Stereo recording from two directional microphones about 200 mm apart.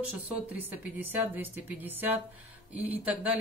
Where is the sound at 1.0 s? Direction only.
10° right (ahead or behind).